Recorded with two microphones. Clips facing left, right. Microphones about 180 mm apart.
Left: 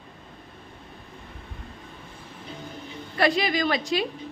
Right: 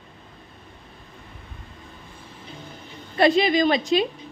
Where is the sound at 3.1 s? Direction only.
25° right (ahead or behind).